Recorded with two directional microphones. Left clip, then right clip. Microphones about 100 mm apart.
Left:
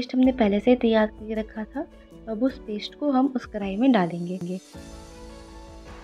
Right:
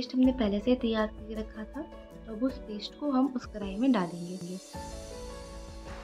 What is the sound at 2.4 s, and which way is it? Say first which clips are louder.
A woman's voice: left 6 dB; 60° left (ahead or behind).